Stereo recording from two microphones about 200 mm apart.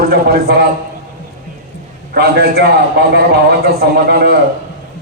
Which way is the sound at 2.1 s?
55° right (ahead or behind).